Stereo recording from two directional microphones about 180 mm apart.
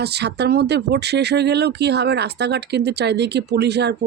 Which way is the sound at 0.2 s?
65° right (ahead or behind).